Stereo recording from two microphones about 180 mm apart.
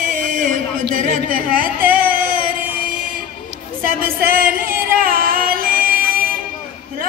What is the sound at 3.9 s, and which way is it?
Music, 50° right (ahead or behind).